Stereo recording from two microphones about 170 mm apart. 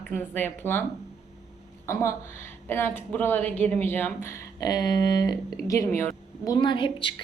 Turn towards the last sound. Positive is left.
turn(degrees=30)  # may be behind; listen again after turning